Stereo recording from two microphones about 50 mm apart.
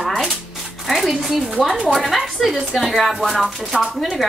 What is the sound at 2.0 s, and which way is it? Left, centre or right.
Speech, centre.